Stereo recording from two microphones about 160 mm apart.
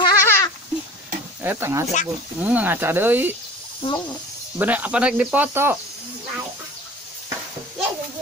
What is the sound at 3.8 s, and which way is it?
Speech, 35° left (ahead or behind).